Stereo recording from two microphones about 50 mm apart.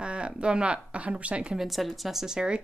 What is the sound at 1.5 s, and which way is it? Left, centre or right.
Speech, centre.